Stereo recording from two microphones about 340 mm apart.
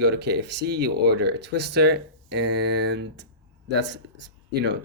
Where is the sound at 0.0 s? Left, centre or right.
Right.